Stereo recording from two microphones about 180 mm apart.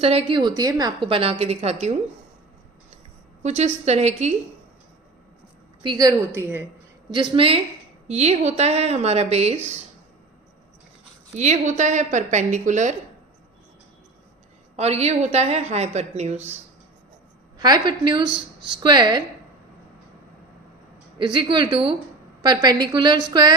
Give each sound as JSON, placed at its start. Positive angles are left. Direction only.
{"t": 0.0, "sound": "a woman's voice", "side_deg": -35}
{"t": 3.4, "sound": "a woman's voice", "side_deg": -40}
{"t": 5.8, "sound": "a woman's voice", "side_deg": -25}
{"t": 7.1, "sound": "a woman's voice", "side_deg": -30}
{"t": 11.3, "sound": "a woman's voice", "side_deg": -40}
{"t": 14.8, "sound": "a woman's voice", "side_deg": -35}
{"t": 17.6, "sound": "a woman's voice", "side_deg": -20}
{"t": 21.2, "sound": "a woman's voice", "side_deg": -25}